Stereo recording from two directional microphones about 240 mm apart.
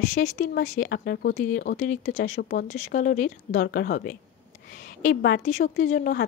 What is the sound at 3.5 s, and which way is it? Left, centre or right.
A woman's voice, left.